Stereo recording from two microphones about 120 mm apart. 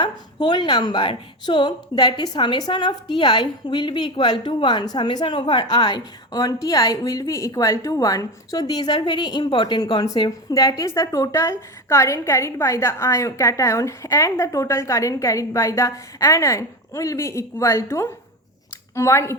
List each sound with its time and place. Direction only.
0.0 s a woman's voice: 40° left (ahead or behind)